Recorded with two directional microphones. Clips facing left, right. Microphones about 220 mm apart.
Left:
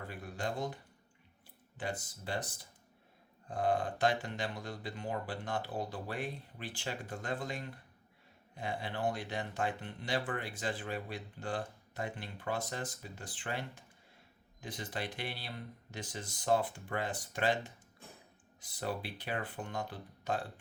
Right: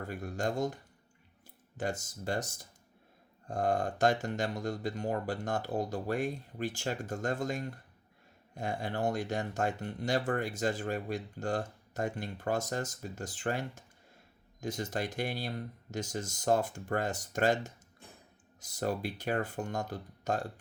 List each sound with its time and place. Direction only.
0.1 s speech: 45° right (ahead or behind)
1.8 s speech: 45° right (ahead or behind)